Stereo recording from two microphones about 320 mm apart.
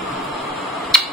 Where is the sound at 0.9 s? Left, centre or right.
Centre.